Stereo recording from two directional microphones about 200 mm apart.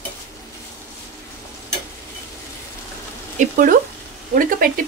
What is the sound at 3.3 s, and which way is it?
Speech, 40° right (ahead or behind).